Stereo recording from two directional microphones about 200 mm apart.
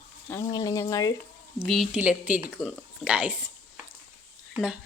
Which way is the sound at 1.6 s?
Centre (ahead or behind).